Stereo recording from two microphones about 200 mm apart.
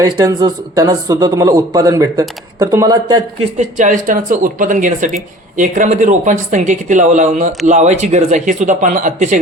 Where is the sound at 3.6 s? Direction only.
40° right (ahead or behind).